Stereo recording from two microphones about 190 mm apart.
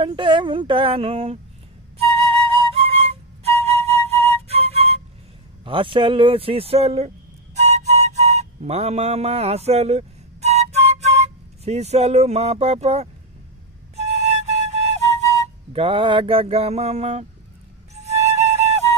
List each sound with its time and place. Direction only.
0.0 s speech: 25° right (ahead or behind)
2.0 s flute: 30° right (ahead or behind)
5.7 s speech: 25° right (ahead or behind)
7.5 s music: 35° right (ahead or behind)
11.6 s a sound: 35° right (ahead or behind)
13.9 s flute: 35° right (ahead or behind)
15.7 s a sound: 30° right (ahead or behind)
17.9 s music: 35° right (ahead or behind)